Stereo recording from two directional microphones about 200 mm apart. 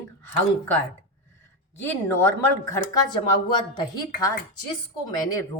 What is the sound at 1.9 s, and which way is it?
Speech, 10° left (ahead or behind).